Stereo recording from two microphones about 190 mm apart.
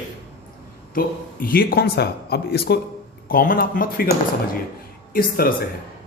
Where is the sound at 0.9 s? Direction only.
50° left (ahead or behind).